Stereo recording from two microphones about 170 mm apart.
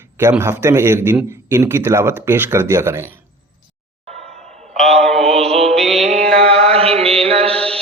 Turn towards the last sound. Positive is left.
turn(degrees=-35)  # may be behind; listen again after turning